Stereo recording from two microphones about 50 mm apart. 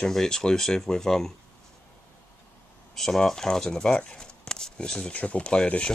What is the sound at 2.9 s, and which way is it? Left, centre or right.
Speech, centre.